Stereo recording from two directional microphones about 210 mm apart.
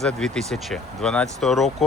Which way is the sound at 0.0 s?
Centre (ahead or behind).